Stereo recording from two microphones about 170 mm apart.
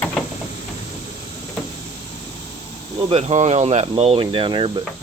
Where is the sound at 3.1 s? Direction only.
40° right (ahead or behind).